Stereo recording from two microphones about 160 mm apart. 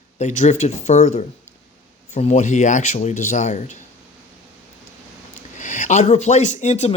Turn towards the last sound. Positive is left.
turn(degrees=45)  # may be behind; listen again after turning